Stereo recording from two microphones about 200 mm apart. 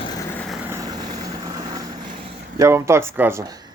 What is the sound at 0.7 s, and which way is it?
Vehicle, 20° right (ahead or behind).